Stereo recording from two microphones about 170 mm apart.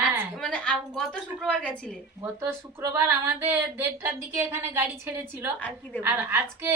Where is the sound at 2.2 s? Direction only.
15° right (ahead or behind).